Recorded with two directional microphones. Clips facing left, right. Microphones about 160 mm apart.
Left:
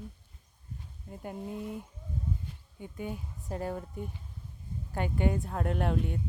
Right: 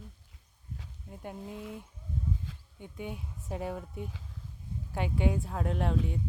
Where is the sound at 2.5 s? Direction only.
90° right.